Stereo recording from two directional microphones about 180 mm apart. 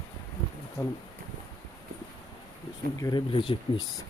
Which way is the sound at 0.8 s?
20° left (ahead or behind).